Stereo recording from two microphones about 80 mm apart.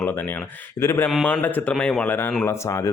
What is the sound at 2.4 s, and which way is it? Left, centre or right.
Speech, left.